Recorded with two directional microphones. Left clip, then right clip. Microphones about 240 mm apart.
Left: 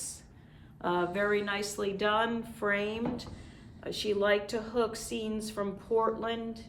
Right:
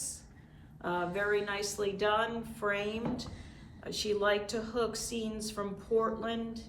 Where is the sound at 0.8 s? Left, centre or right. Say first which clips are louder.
Left 3 dB; left.